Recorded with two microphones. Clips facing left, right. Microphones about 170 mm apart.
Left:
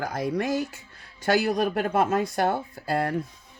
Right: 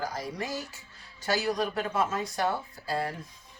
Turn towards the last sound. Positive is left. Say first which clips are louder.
# left 5 dB
turn(degrees=55)  # may be behind; listen again after turning